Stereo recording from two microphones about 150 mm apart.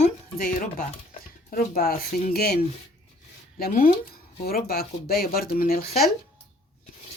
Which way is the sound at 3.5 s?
80° left.